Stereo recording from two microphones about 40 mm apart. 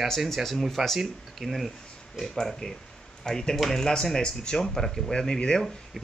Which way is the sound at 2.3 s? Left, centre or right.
Centre.